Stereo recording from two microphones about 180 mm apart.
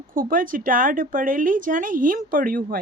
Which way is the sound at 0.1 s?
50° right (ahead or behind).